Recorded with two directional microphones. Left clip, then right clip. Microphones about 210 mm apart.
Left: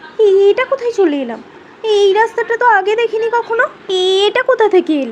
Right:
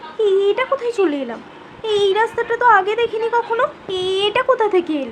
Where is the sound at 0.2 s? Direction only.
15° left (ahead or behind).